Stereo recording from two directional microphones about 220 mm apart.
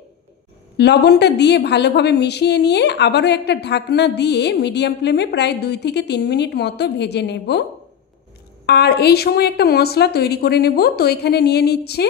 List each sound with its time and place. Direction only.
0.7 s a woman's voice: 50° left (ahead or behind)
8.6 s a woman's voice: 45° left (ahead or behind)